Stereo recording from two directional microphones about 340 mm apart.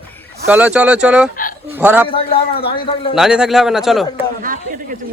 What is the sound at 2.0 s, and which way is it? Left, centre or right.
A man's voice, centre.